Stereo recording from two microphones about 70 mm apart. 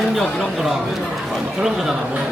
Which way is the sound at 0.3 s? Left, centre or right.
Centre.